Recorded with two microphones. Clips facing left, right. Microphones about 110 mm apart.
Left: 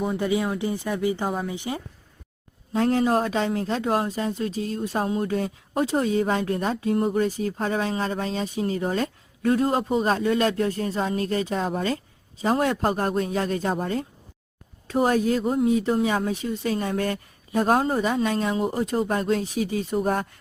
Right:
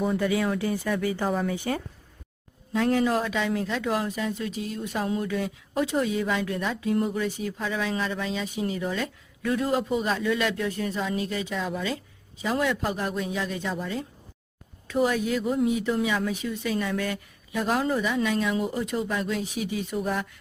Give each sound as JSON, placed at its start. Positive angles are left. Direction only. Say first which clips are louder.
{"t": 0.2, "sound": "speech", "louder": "left 1 dB", "side_deg": 20}
{"t": 2.7, "sound": "speech", "louder": "left 2 dB", "side_deg": 45}